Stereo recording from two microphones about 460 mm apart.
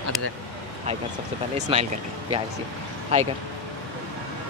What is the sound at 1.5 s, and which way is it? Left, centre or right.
Speech, centre.